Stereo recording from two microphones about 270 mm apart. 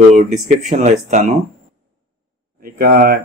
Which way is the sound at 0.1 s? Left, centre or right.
Right.